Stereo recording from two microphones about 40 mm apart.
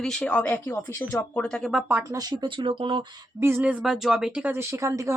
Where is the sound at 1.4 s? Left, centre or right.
Centre.